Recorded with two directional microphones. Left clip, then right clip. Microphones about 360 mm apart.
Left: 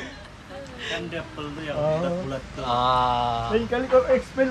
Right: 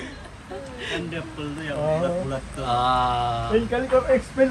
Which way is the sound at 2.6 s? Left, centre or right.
Centre.